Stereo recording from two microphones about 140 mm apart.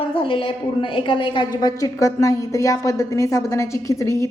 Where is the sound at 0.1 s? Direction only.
40° left (ahead or behind).